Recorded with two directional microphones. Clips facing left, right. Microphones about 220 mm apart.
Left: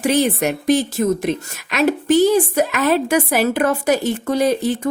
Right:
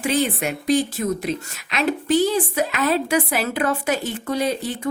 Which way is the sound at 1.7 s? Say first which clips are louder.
Left 5 dB; 45° left (ahead or behind).